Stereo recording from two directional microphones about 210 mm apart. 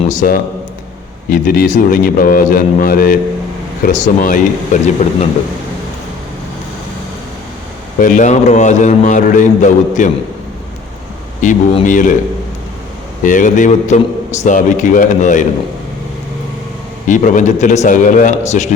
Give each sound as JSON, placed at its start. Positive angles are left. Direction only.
{"t": 0.1, "sound": "a man's voice", "side_deg": 40}
{"t": 7.9, "sound": "a man's voice", "side_deg": 40}
{"t": 11.3, "sound": "a man's voice", "side_deg": 35}
{"t": 13.2, "sound": "a man's voice", "side_deg": 40}
{"t": 17.1, "sound": "a man's voice", "side_deg": 35}